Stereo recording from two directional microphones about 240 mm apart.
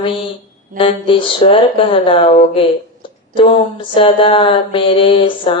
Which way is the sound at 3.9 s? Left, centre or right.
Left.